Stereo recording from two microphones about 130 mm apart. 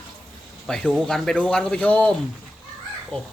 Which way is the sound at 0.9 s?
5° left (ahead or behind).